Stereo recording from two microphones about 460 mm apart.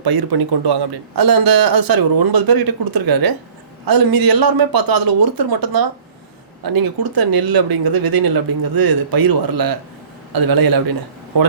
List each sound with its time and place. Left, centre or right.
0.0 s speech: right